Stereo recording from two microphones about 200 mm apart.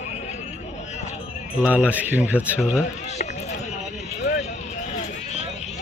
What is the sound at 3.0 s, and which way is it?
Run, 35° left (ahead or behind).